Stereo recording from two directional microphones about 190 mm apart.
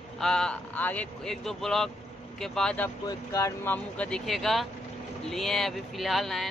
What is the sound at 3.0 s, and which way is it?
Speech, 15° left (ahead or behind).